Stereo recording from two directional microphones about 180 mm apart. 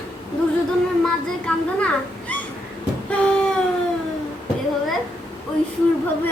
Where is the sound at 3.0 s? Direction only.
5° left (ahead or behind).